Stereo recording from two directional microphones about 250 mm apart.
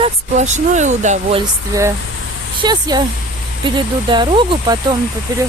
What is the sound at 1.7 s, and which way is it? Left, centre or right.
Speech, centre.